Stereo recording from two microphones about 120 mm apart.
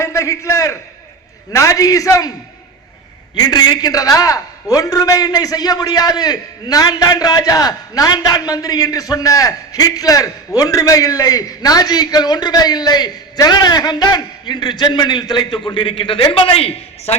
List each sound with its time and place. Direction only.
0.0 s a man's voice: 25° left (ahead or behind)
3.3 s a man's voice: 35° left (ahead or behind); by 17.2 s 55° left (ahead or behind)